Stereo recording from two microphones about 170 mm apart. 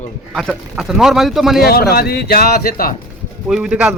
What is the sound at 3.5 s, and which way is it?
Speech, 5° right (ahead or behind).